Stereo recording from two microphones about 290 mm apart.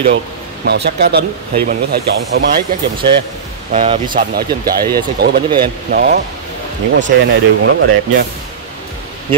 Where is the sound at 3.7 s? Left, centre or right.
Right.